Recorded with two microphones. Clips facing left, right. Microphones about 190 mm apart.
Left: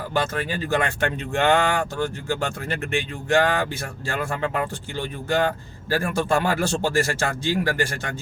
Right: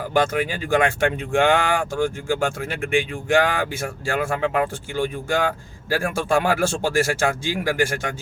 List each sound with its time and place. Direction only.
0.1 s speech: 10° right (ahead or behind)